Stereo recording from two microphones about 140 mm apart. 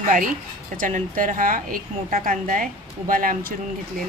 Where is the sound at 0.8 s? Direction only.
75° right (ahead or behind).